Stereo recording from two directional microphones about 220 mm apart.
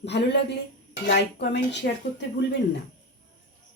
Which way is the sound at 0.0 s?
50° left (ahead or behind).